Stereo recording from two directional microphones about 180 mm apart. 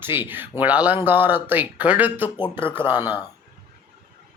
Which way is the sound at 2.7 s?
10° right (ahead or behind).